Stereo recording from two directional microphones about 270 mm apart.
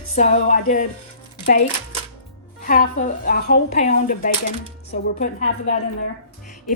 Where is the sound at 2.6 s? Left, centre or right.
Left.